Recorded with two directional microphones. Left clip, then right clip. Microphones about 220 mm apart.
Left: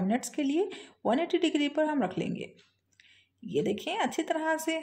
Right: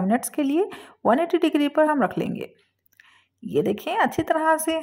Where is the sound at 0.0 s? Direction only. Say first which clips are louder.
Right 7 dB; 10° right (ahead or behind).